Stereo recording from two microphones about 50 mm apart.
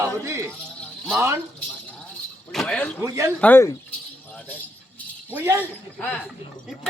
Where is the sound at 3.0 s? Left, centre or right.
Right.